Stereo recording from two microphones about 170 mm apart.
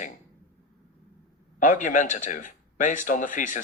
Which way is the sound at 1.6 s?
50° left (ahead or behind).